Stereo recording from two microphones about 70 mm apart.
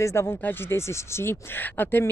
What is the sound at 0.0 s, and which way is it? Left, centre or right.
Speech, left.